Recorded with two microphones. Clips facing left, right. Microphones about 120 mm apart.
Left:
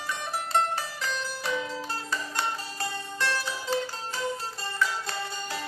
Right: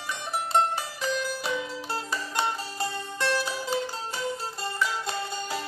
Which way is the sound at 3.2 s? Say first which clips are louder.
Right 3 dB; 20° right (ahead or behind).